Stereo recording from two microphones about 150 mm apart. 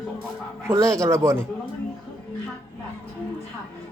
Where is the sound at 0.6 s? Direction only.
20° right (ahead or behind).